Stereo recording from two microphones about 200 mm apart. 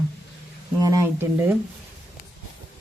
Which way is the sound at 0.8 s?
15° right (ahead or behind).